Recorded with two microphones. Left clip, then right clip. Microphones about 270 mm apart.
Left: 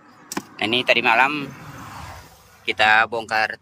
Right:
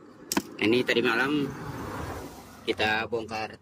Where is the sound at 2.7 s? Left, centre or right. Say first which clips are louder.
Left 10 dB; centre.